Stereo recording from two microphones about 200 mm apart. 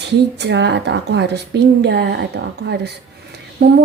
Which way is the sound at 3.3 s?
55° right (ahead or behind).